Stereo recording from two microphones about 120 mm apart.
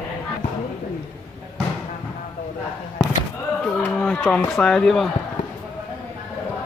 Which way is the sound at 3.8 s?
15° left (ahead or behind).